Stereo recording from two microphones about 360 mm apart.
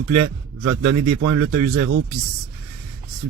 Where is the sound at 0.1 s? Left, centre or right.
Right.